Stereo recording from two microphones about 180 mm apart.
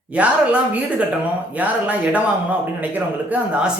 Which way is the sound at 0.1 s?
5° right (ahead or behind).